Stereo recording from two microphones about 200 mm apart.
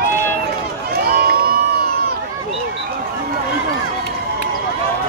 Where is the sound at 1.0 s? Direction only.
50° right (ahead or behind).